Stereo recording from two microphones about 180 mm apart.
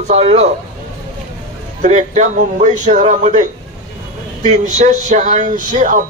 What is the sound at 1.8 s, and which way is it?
Speech, 40° right (ahead or behind).